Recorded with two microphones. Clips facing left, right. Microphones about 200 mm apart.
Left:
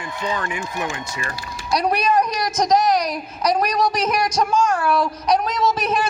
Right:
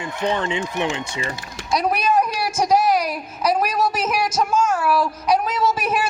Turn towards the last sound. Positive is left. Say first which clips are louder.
# left 1 dB
turn(degrees=-10)  # may be behind; listen again after turning